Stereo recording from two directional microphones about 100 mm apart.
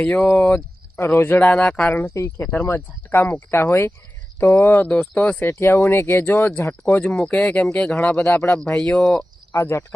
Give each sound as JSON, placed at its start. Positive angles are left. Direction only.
{"t": 0.0, "sound": "speech", "side_deg": 15}
{"t": 2.0, "sound": "speech", "side_deg": 30}
{"t": 2.4, "sound": "speech", "side_deg": 15}
{"t": 7.0, "sound": "speech", "side_deg": 10}
{"t": 9.5, "sound": "speech", "side_deg": 25}